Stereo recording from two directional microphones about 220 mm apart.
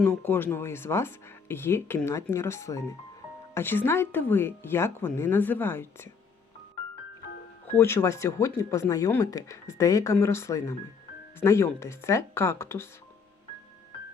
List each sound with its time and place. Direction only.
0.0 s speech: 10° left (ahead or behind)
7.7 s speech: 10° left (ahead or behind)